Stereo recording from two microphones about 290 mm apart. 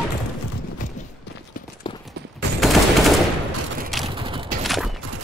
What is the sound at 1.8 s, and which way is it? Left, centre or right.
Clip-clop, centre.